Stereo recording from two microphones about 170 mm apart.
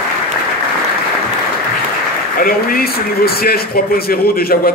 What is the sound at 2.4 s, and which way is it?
A man's voice, 60° left (ahead or behind).